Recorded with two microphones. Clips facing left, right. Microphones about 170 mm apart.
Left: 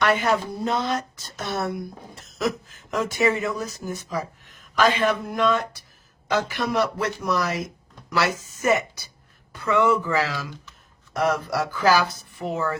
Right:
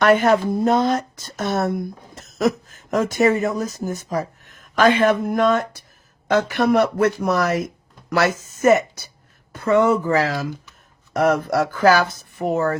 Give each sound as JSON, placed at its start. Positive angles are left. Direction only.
{"t": 0.0, "sound": "speech", "side_deg": -50}